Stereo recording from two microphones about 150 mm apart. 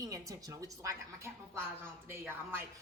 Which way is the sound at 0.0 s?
20° right (ahead or behind).